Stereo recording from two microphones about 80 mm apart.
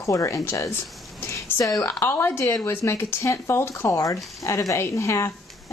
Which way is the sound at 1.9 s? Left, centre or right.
Left.